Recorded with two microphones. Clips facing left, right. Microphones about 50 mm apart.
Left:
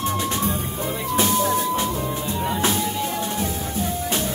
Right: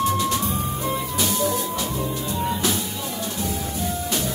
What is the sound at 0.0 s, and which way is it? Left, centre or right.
Music, left.